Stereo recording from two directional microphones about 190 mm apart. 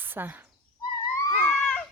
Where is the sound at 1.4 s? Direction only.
5° left (ahead or behind).